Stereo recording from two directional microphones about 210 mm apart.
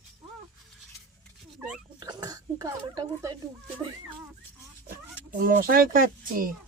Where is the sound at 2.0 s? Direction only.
20° right (ahead or behind).